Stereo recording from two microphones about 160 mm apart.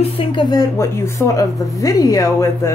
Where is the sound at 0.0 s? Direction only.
35° left (ahead or behind).